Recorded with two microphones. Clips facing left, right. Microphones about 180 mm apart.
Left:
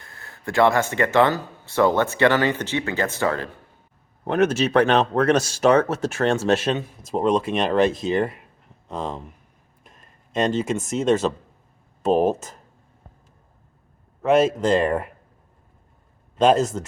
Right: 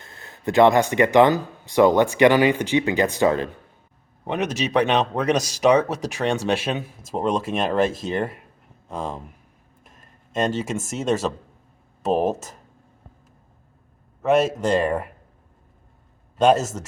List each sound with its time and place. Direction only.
0.0 s speech: 20° right (ahead or behind)
4.3 s speech: centre (ahead or behind)
14.2 s speech: centre (ahead or behind)
16.4 s speech: centre (ahead or behind)